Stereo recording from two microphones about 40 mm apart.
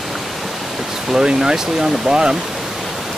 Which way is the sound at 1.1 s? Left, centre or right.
Centre.